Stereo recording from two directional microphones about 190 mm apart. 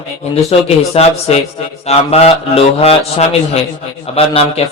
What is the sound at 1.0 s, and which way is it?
A man's voice, 30° left (ahead or behind).